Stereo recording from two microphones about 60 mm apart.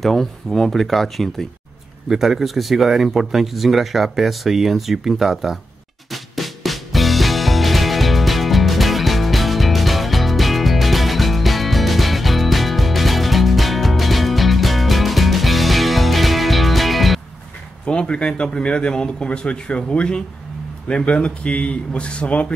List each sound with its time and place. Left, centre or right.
0.0 s speech: centre
6.1 s music: centre
17.8 s speech: centre